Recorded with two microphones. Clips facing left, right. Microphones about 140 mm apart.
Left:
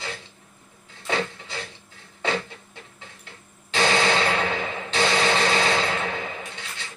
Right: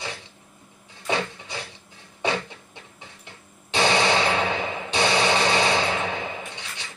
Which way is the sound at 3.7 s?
20° right (ahead or behind).